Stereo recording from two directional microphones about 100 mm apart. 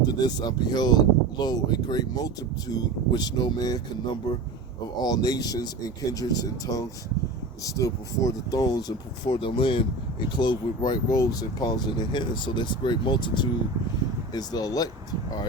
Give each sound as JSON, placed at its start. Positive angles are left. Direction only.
{"t": 0.0, "sound": "speech", "side_deg": 40}
{"t": 14.3, "sound": "speech", "side_deg": 40}